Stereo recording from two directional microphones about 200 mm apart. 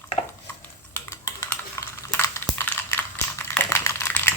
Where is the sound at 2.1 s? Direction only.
15° left (ahead or behind).